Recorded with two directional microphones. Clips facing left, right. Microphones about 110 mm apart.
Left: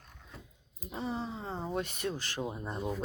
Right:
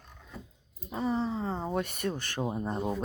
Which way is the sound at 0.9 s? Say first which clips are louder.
Right 6 dB; 40° right (ahead or behind).